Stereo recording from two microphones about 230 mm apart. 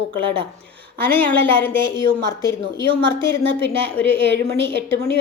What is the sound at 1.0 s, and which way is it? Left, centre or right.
Speech, centre.